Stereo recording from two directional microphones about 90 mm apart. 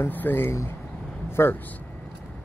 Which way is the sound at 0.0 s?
20° left (ahead or behind).